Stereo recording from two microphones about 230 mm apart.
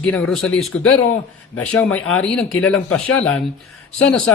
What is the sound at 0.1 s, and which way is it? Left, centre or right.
Speech, centre.